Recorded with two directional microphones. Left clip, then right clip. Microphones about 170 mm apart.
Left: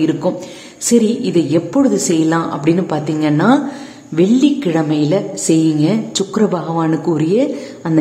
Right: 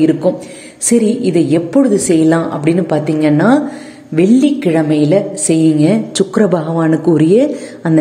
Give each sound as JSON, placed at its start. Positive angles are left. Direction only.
{"t": 0.8, "sound": "a woman's voice", "side_deg": -15}